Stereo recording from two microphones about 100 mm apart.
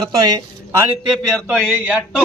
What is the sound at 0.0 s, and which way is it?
Speech, 40° right (ahead or behind).